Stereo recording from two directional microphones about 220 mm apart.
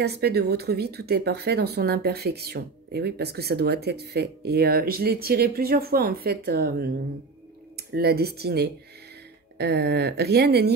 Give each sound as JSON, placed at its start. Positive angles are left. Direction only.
{"t": 0.0, "sound": "speech", "side_deg": -45}